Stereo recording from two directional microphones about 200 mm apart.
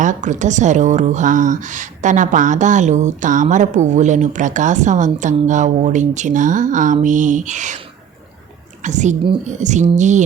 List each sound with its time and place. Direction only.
0.0 s a woman's voice: 40° right (ahead or behind)
8.8 s a woman's voice: 35° right (ahead or behind)